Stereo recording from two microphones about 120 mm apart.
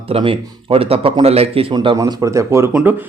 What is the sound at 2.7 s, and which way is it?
Speech, 10° right (ahead or behind).